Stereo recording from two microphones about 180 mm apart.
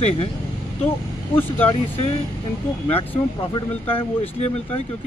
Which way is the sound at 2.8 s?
30° left (ahead or behind).